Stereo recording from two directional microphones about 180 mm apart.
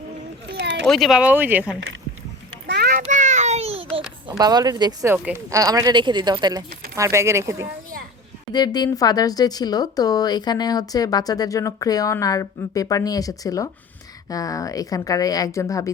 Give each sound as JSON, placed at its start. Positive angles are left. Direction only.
{"t": 0.5, "sound": "a sound", "side_deg": -80}
{"t": 0.9, "sound": "speech", "side_deg": 0}
{"t": 2.6, "sound": "child singing", "side_deg": -65}
{"t": 3.0, "sound": "child singing", "side_deg": -45}
{"t": 4.3, "sound": "speech", "side_deg": -20}
{"t": 5.1, "sound": "speech", "side_deg": -10}
{"t": 8.5, "sound": "speech", "side_deg": 20}